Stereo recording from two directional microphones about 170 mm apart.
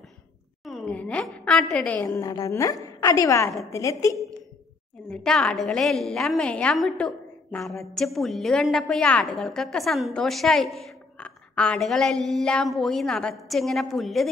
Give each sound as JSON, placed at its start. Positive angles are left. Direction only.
{"t": 0.7, "sound": "a woman's voice", "side_deg": 5}
{"t": 2.0, "sound": "a woman's voice", "side_deg": 20}
{"t": 5.1, "sound": "a woman's voice", "side_deg": 5}